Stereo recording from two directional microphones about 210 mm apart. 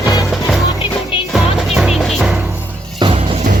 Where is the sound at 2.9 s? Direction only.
25° right (ahead or behind).